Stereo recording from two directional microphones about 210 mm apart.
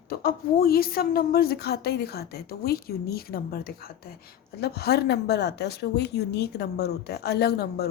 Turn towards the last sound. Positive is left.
turn(degrees=50)  # may be behind; listen again after turning